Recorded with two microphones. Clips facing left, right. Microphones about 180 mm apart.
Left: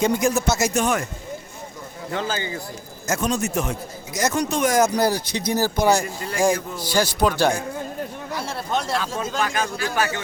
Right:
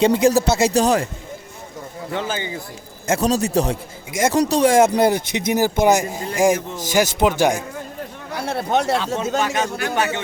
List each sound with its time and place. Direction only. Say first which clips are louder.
0.0 s speech: right 5 dB; 30° right (ahead or behind)
2.0 s speech: right 1 dB; 20° right (ahead or behind)
3.1 s a man's voice: right 5 dB; 35° right (ahead or behind); by 7.6 s 15° right (ahead or behind)
8.4 s a man's voice: right 7 dB; 60° right (ahead or behind)
9.4 s speech: right 3 dB; 25° right (ahead or behind)